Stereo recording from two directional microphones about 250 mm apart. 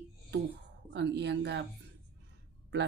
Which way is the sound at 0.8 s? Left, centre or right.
Right.